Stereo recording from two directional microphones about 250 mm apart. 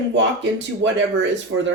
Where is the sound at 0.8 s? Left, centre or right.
Right.